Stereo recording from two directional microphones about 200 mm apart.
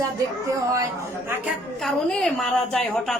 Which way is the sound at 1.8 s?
Centre (ahead or behind).